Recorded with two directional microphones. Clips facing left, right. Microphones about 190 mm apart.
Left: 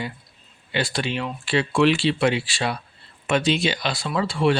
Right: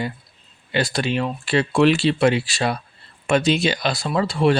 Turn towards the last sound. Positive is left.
turn(degrees=-40)  # may be behind; listen again after turning